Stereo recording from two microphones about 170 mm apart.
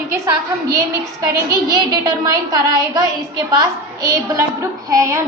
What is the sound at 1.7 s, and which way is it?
A woman's voice, 25° right (ahead or behind).